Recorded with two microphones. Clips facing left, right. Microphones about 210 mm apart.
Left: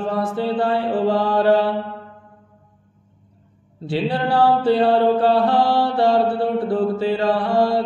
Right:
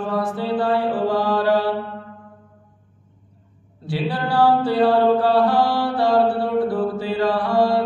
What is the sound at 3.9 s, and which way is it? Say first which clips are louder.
Mantra: left 3 dB; 25° left (ahead or behind).